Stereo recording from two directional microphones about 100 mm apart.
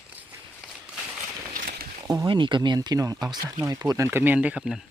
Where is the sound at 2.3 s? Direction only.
55° right (ahead or behind).